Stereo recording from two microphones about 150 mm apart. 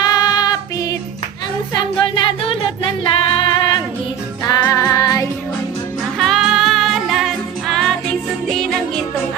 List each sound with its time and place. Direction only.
0.0 s child singing: 25° left (ahead or behind)
1.7 s music: 35° left (ahead or behind)
4.6 s child singing: 20° left (ahead or behind)
6.1 s music: centre (ahead or behind)